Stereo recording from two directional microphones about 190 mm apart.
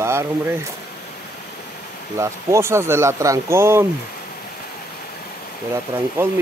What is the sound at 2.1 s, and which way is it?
Speech, 15° right (ahead or behind).